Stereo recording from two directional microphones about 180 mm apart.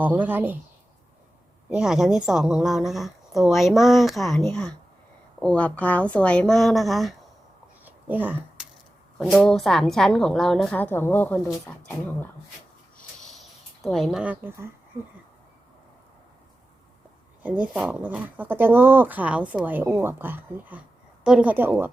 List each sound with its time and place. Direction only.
0.0 s speech: 10° right (ahead or behind)
1.7 s a woman's voice: 5° right (ahead or behind)
7.9 s a sound: 10° right (ahead or behind)
9.1 s a woman's voice: centre (ahead or behind)
13.8 s a woman's voice: centre (ahead or behind)
17.4 s speech: 10° right (ahead or behind)